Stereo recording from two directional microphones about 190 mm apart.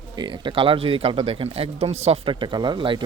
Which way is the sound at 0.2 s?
25° right (ahead or behind).